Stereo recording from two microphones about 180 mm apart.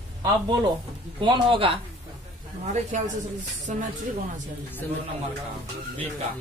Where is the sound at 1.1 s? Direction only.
30° right (ahead or behind).